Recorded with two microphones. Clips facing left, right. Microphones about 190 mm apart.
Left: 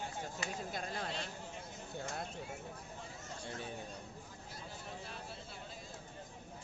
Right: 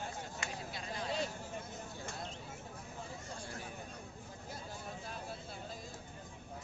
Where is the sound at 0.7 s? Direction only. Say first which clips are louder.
Left 1 dB; 50° left (ahead or behind).